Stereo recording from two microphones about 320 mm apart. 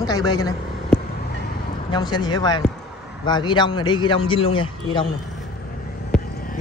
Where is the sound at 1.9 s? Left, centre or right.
Centre.